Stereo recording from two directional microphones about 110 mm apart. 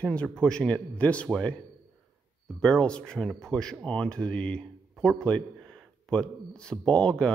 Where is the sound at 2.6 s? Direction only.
10° left (ahead or behind).